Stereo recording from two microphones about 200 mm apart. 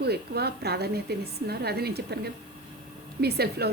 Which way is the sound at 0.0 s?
55° right (ahead or behind).